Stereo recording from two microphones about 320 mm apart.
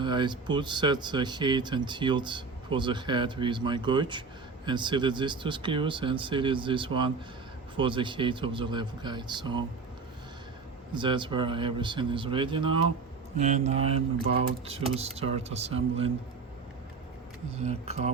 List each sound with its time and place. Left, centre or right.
0.0 s speech: centre
10.9 s speech: centre
17.6 s speech: centre